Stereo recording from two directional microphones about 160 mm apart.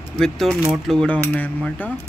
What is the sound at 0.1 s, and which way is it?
Speech, centre (ahead or behind).